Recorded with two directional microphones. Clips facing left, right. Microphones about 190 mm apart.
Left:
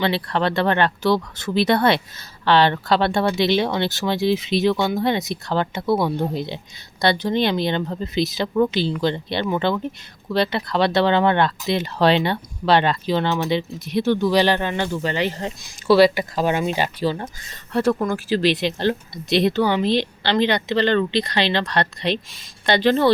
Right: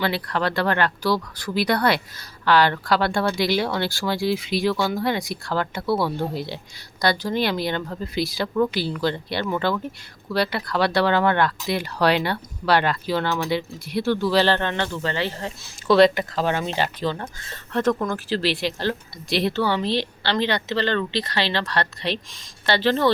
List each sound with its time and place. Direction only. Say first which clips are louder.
0.0 s speech: left 3 dB; 25° left (ahead or behind)
15.9 s speech: left 1 dB; 5° left (ahead or behind)